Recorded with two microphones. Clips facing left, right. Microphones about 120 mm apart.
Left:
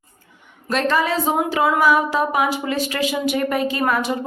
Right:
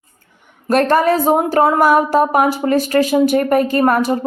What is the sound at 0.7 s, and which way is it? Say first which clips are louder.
Speech: right 7 dB; 50° right (ahead or behind).